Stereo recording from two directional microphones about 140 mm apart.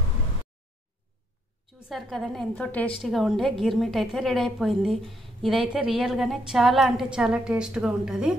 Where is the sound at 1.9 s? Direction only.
Centre (ahead or behind).